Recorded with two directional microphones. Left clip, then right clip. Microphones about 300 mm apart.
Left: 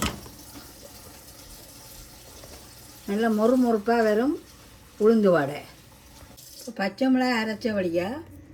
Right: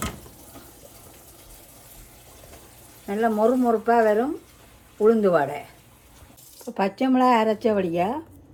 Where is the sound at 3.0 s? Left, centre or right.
Centre.